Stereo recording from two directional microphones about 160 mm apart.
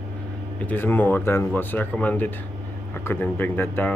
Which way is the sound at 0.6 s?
10° left (ahead or behind).